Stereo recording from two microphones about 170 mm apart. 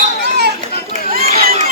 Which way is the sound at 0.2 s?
75° right (ahead or behind).